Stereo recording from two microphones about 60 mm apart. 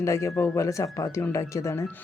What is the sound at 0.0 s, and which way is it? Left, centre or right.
Speech, left.